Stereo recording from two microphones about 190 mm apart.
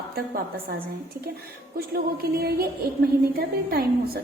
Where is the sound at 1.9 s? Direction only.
55° right (ahead or behind).